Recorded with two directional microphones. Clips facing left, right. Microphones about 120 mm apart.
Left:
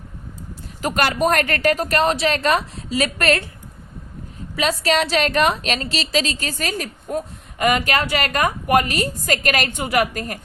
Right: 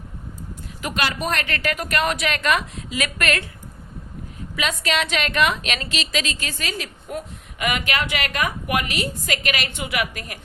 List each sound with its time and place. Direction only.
0.8 s a woman's voice: 40° left (ahead or behind)
4.5 s a woman's voice: 35° left (ahead or behind)